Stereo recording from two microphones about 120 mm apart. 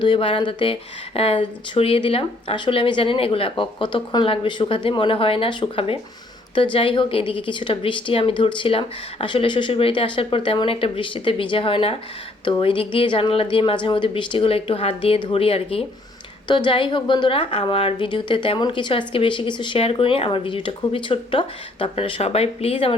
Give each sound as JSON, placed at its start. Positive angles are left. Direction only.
{"t": 0.0, "sound": "a woman's voice", "side_deg": 45}
{"t": 16.5, "sound": "a woman's voice", "side_deg": 40}